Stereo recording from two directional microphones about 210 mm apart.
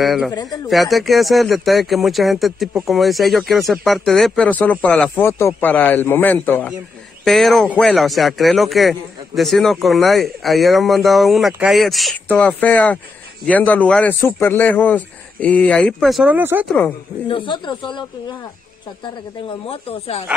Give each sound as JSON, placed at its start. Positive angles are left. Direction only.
{"t": 0.0, "sound": "speech", "side_deg": 0}
{"t": 0.3, "sound": "speech", "side_deg": 20}
{"t": 0.7, "sound": "a man's voice", "side_deg": 0}
{"t": 17.3, "sound": "speech", "side_deg": 25}
{"t": 19.6, "sound": "speech", "side_deg": 25}